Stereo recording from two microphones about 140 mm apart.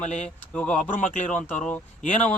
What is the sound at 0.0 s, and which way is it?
Speech, 55° left (ahead or behind).